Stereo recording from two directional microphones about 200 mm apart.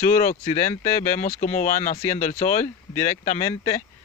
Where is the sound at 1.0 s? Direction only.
35° left (ahead or behind).